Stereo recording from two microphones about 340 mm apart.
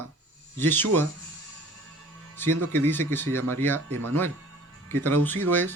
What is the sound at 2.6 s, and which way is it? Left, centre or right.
Speech, centre.